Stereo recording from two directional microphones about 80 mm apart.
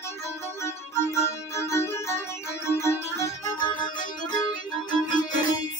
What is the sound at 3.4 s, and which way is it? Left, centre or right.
Music, left.